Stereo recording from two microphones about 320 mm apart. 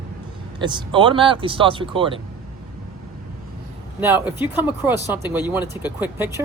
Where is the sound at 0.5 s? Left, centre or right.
Centre.